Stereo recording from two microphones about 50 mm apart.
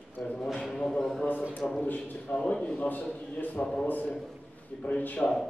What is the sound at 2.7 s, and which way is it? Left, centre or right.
Speech, left.